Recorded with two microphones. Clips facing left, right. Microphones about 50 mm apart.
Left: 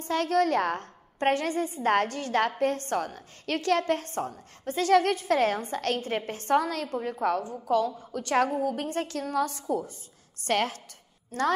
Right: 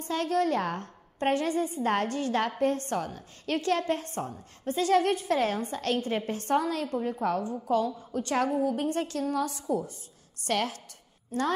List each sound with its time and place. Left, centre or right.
0.0 s a woman's voice: left